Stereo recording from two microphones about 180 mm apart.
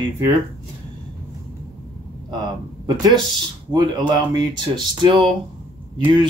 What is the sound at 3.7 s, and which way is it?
Speech, 25° right (ahead or behind).